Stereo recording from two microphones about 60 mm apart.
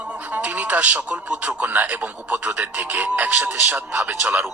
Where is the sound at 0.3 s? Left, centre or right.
Right.